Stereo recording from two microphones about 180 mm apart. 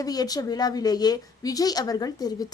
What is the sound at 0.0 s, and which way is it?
A woman's voice, 20° left (ahead or behind).